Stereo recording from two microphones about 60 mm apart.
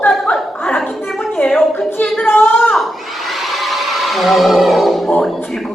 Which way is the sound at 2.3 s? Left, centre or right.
Left.